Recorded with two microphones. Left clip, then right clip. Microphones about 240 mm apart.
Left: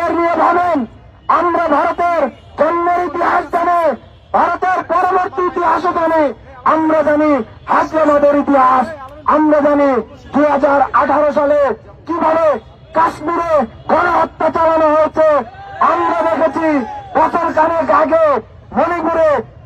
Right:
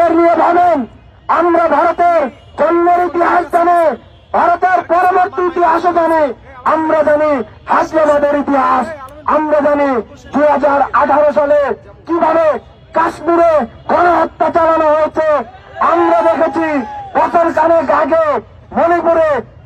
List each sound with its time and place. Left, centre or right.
0.0 s a man's voice: right